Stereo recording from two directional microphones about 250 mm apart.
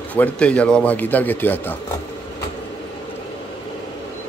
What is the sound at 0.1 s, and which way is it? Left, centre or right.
Speech, centre.